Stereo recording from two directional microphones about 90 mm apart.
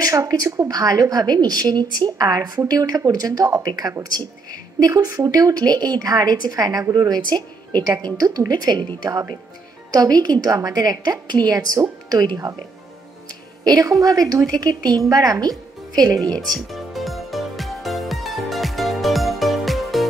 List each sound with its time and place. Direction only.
0.0 s a woman's voice: 40° right (ahead or behind)
13.7 s a woman's voice: 40° right (ahead or behind)
16.3 s music: centre (ahead or behind)